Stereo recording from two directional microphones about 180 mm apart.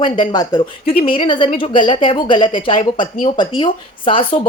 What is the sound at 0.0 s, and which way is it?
Speech, 25° left (ahead or behind).